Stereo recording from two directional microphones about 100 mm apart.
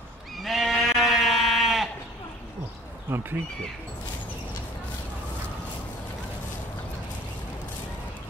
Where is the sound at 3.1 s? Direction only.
20° right (ahead or behind).